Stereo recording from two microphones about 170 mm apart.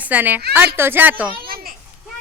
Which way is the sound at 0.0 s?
10° right (ahead or behind).